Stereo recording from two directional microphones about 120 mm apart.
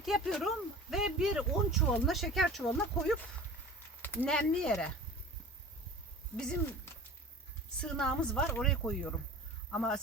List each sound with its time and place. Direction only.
0.0 s speech: centre (ahead or behind)
4.0 s a sound: 15° left (ahead or behind)
4.3 s speech: 5° left (ahead or behind)
7.8 s a woman's voice: 5° left (ahead or behind)